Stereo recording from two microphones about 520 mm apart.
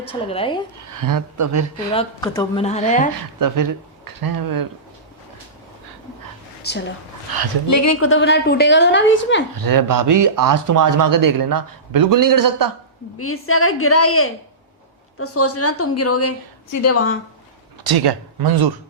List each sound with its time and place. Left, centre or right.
0.0 s speech: centre
0.9 s speech: right
1.9 s speech: centre
3.2 s speech: right
6.6 s speech: centre
7.7 s a woman's voice: left
9.6 s speech: right
13.1 s a woman's voice: left
17.8 s speech: right